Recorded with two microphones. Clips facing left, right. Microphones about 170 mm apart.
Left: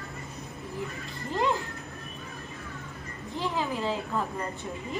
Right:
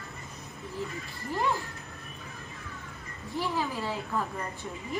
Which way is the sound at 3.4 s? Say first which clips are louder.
Left 1 dB; 20° left (ahead or behind).